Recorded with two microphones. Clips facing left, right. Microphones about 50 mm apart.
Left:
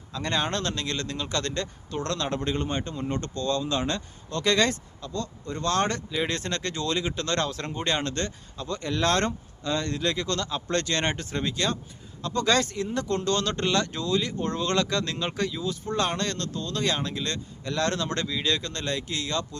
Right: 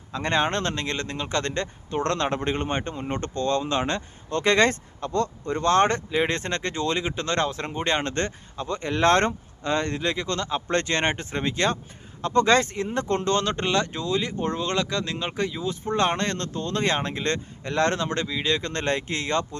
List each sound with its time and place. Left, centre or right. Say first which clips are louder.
0.1 s speech: right 4 dB; right
5.5 s speech: right 6 dB; right
18.7 s speech: right 5 dB; right